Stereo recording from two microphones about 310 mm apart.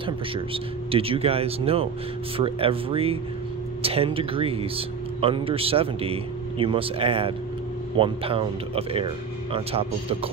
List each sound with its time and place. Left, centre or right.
0.0 s speech: centre